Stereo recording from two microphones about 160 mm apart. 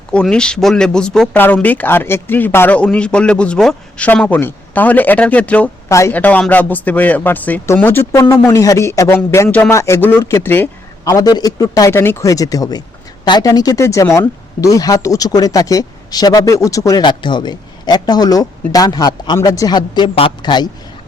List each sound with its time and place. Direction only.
0.1 s a man's voice: 5° left (ahead or behind); by 20.7 s 30° left (ahead or behind)